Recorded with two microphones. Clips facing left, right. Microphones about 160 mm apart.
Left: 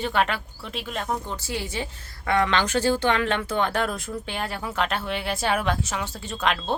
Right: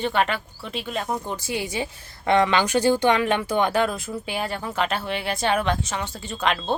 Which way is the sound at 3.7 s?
Centre (ahead or behind).